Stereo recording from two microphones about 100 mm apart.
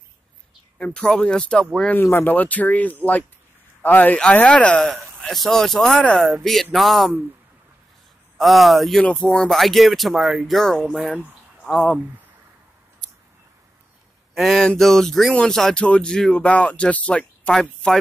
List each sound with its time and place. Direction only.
0.7 s speech: 10° left (ahead or behind)
2.0 s speech: 20° left (ahead or behind); by 7.2 s centre (ahead or behind)
8.4 s speech: centre (ahead or behind)
9.0 s speech: 10° left (ahead or behind)
13.0 s a sound: 10° left (ahead or behind)
14.3 s speech: centre (ahead or behind)